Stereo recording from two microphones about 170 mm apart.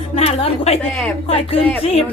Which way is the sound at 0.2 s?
35° left (ahead or behind).